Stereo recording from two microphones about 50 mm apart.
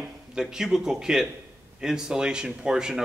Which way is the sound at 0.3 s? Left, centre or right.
Centre.